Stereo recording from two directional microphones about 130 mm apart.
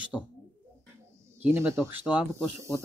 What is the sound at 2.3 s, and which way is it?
Speech, 20° right (ahead or behind).